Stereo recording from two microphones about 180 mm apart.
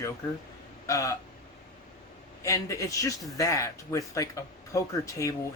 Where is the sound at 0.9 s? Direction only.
15° left (ahead or behind).